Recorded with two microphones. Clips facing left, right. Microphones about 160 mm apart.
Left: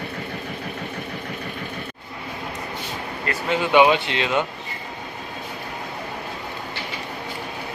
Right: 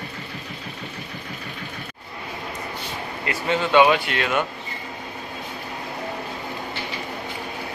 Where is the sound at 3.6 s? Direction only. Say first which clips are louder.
Left 1 dB; 15° left (ahead or behind).